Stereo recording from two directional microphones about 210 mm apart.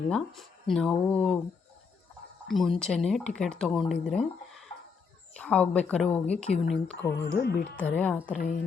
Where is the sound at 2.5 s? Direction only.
Centre (ahead or behind).